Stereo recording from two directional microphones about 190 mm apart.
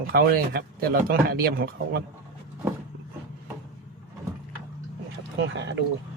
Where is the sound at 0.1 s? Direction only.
50° right (ahead or behind).